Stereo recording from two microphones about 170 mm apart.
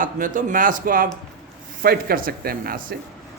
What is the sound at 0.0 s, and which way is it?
A man's voice, 50° right (ahead or behind).